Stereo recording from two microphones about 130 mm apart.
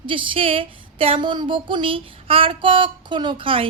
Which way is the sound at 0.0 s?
40° right (ahead or behind).